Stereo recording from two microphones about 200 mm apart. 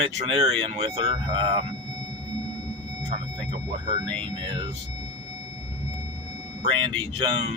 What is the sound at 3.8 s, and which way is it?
Speech, 20° right (ahead or behind).